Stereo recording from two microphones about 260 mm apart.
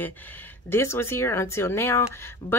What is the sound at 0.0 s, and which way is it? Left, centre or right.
A woman's voice, centre.